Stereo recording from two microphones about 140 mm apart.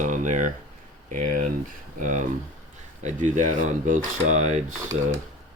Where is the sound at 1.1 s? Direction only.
65° right (ahead or behind).